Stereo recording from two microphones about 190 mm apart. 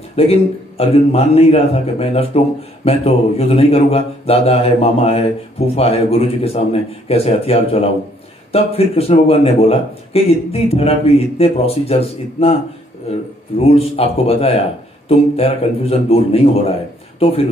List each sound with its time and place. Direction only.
0.1 s a man's voice: 30° left (ahead or behind)